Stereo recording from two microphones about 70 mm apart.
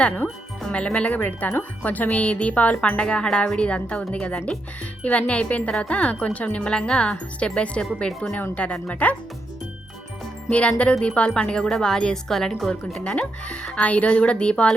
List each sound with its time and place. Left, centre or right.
0.6 s a woman's voice: centre
10.5 s a woman's voice: centre
13.1 s a woman's voice: centre